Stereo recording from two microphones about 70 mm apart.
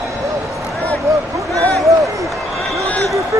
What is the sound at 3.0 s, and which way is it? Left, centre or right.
Run, right.